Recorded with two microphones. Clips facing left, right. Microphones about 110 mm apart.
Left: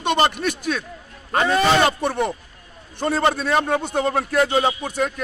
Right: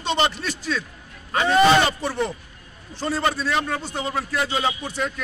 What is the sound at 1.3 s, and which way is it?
Speech, 45° left (ahead or behind).